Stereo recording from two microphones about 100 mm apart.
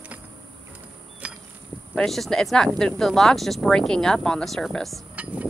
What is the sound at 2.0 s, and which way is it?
Speech, centre (ahead or behind).